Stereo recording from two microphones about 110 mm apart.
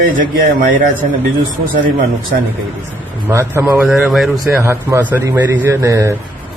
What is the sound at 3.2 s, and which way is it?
Speech, 20° right (ahead or behind).